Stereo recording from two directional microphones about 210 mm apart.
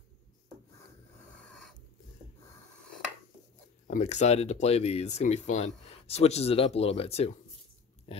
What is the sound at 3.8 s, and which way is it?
Speech, 35° left (ahead or behind).